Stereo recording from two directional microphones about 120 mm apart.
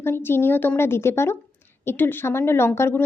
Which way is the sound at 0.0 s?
20° left (ahead or behind).